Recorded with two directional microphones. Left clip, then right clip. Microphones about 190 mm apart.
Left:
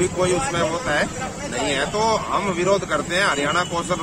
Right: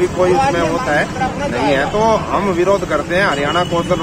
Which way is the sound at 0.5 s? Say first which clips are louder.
Right 6 dB; 15° left (ahead or behind).